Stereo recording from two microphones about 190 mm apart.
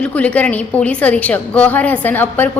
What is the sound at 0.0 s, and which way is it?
A woman's voice, 5° left (ahead or behind).